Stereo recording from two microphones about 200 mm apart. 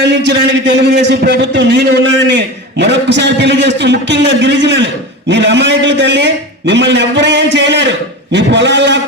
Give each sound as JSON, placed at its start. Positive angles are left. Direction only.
{"t": 0.0, "sound": "a man's voice", "side_deg": -60}